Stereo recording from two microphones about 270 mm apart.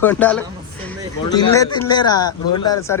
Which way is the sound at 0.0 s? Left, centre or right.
Centre.